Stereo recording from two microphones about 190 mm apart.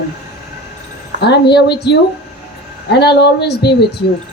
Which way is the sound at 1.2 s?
60° left (ahead or behind).